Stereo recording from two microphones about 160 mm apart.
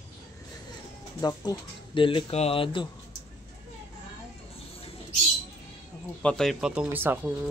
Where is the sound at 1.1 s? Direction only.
25° left (ahead or behind).